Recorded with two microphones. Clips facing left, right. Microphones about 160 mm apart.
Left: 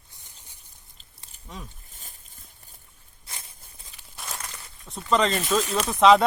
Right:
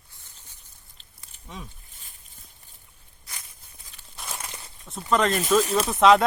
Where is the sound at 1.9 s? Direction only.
40° left (ahead or behind).